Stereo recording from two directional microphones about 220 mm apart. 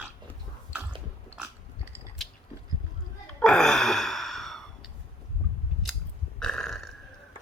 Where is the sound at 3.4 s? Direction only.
5° left (ahead or behind).